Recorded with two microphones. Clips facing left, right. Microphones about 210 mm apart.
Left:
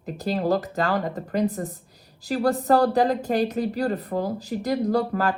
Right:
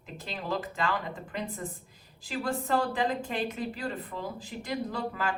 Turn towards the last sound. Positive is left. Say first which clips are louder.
# left 10 dB
turn(degrees=45)  # may be behind; listen again after turning